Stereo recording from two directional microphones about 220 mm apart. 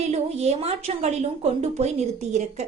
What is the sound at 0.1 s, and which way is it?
A woman's voice, 30° right (ahead or behind).